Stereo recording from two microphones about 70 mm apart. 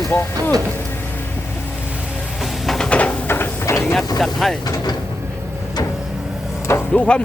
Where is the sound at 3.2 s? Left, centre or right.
Left.